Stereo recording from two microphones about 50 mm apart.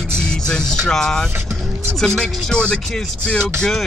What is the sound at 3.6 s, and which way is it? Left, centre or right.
Speech, centre.